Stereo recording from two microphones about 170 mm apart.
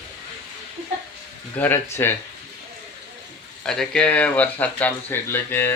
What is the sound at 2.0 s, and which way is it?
Speech, 15° left (ahead or behind).